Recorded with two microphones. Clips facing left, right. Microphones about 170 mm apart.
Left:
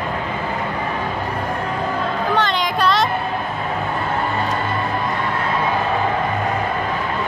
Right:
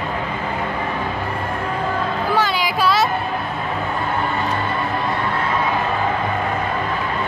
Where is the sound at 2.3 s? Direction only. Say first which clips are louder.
Right 1 dB; 5° right (ahead or behind).